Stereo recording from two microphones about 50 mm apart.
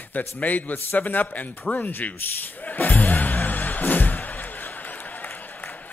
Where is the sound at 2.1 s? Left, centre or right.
Left.